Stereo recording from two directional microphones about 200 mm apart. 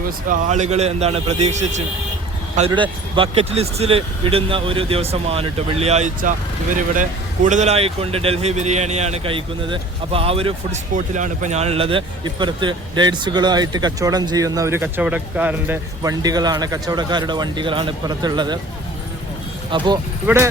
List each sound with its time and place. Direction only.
0.0 s a man's voice: 40° right (ahead or behind); by 18.6 s 20° right (ahead or behind)
19.7 s speech: 20° right (ahead or behind)
20.2 s speech: 10° right (ahead or behind)